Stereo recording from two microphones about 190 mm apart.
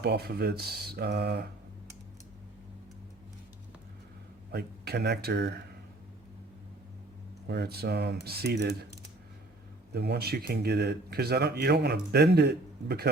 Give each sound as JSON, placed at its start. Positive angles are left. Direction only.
{"t": 0.0, "sound": "speech", "side_deg": -55}
{"t": 4.5, "sound": "speech", "side_deg": -60}
{"t": 7.4, "sound": "speech", "side_deg": -60}
{"t": 9.9, "sound": "speech", "side_deg": -60}